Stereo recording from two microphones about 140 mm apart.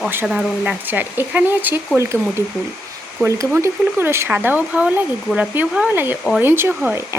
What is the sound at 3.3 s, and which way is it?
Speech, 20° right (ahead or behind).